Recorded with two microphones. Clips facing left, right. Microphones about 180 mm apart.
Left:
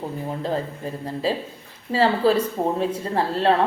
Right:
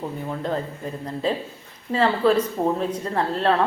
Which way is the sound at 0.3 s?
30° left (ahead or behind).